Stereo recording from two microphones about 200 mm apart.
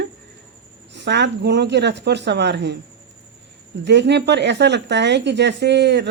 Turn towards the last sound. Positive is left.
turn(degrees=-60)  # may be behind; listen again after turning